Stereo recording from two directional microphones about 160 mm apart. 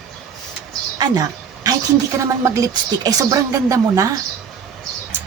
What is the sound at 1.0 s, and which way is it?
A woman's voice, 20° right (ahead or behind).